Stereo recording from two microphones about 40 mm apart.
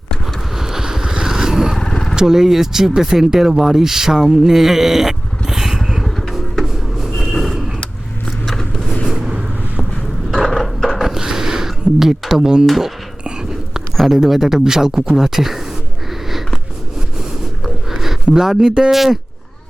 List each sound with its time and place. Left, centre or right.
0.5 s a sound: centre
1.8 s vehicle: centre
2.1 s speech: centre
4.3 s vehicle: centre
6.1 s a sound: centre
7.0 s vehicle: centre
8.4 s vehicle: centre
10.5 s mechanisms: centre
11.0 s a sound: centre
12.6 s speech: centre
13.2 s biting: centre
13.9 s a sound: centre
14.3 s speech: centre
18.3 s speech: centre